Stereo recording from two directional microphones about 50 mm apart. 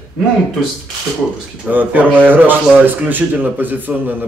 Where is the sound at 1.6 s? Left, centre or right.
Right.